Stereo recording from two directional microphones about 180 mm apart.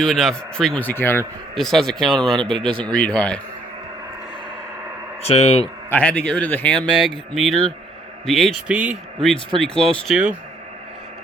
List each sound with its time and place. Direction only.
0.0 s speech: centre (ahead or behind)
5.2 s speech: 35° left (ahead or behind)
5.9 s a man's voice: 5° left (ahead or behind)